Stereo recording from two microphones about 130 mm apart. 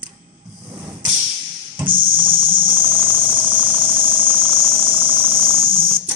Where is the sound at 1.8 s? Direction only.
40° right (ahead or behind).